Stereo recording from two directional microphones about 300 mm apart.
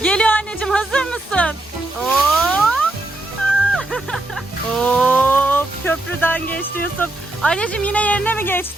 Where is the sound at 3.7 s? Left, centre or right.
Centre.